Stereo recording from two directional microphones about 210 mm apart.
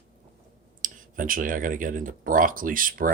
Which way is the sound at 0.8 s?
40° right (ahead or behind).